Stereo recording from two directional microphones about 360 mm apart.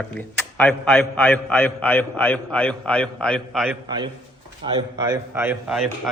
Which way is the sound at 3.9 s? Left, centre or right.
Centre.